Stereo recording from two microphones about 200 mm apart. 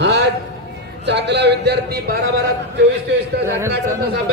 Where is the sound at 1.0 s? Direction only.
60° right (ahead or behind).